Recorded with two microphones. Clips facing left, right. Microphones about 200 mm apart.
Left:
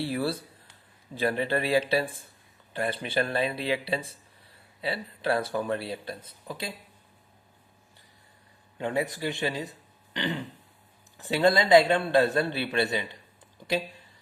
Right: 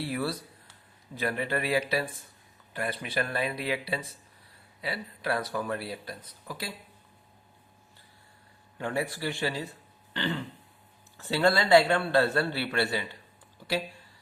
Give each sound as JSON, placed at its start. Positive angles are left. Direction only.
{"t": 0.0, "sound": "speech", "side_deg": 30}
{"t": 8.8, "sound": "speech", "side_deg": 20}
{"t": 10.2, "sound": "throat clearing", "side_deg": 15}
{"t": 11.2, "sound": "speech", "side_deg": 15}